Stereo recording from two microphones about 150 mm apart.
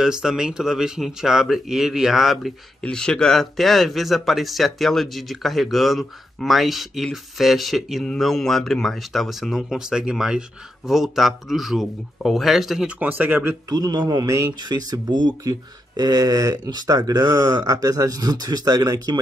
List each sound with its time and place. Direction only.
0.0 s speech: 5° right (ahead or behind)
13.7 s speech: 25° right (ahead or behind)